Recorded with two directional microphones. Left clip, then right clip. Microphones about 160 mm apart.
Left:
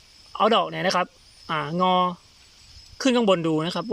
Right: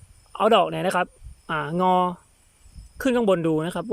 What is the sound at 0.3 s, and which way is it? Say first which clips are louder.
Speech: right 2 dB; 15° right (ahead or behind).